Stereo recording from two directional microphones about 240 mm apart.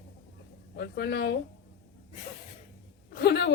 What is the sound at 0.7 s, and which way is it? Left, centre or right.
Speech, left.